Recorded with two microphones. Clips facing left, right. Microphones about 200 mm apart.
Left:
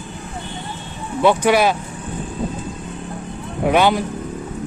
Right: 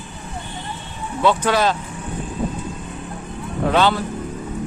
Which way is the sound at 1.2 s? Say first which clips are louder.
Left 3 dB; 15° left (ahead or behind).